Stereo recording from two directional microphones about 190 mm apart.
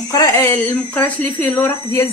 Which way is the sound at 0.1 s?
15° left (ahead or behind).